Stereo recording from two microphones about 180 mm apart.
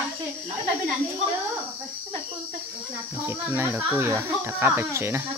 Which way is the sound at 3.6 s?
10° right (ahead or behind).